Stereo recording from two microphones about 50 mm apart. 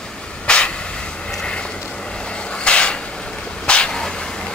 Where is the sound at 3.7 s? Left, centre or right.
Centre.